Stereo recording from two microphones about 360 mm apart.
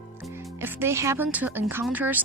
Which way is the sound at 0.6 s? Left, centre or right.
Centre.